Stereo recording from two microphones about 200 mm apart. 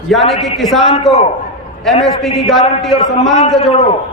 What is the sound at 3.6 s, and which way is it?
Speech, 30° left (ahead or behind).